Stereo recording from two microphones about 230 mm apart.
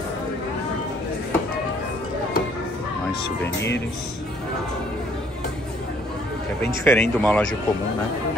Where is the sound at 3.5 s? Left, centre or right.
Left.